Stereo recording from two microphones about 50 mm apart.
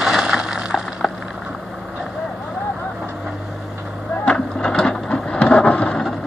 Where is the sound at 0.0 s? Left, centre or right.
Centre.